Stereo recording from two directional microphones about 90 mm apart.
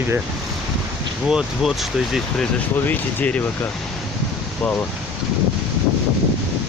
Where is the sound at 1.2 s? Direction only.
5° right (ahead or behind).